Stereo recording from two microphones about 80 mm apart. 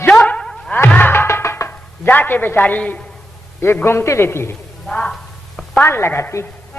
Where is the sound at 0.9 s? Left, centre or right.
Left.